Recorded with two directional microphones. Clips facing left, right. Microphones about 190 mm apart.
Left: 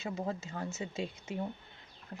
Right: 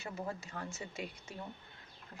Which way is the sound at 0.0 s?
20° left (ahead or behind).